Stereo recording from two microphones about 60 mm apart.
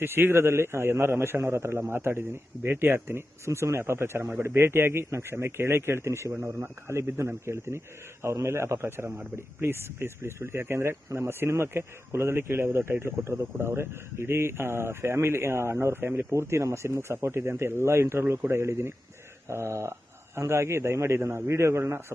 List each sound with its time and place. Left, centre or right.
0.0 s speech: right